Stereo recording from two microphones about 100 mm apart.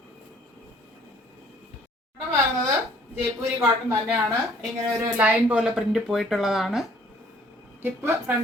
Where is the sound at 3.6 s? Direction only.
25° right (ahead or behind).